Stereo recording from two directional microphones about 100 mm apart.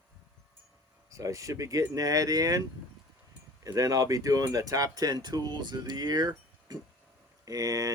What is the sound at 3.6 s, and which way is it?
Speech, 35° right (ahead or behind).